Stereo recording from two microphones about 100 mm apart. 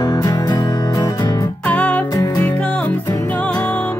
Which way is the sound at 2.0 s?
35° left (ahead or behind).